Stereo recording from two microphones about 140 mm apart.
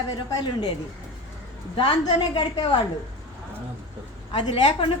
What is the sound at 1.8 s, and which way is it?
Speech, 35° left (ahead or behind).